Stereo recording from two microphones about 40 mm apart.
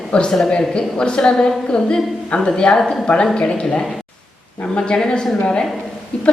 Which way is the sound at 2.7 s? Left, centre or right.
Centre.